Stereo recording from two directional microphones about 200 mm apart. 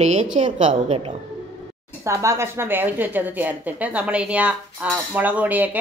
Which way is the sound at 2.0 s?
15° right (ahead or behind).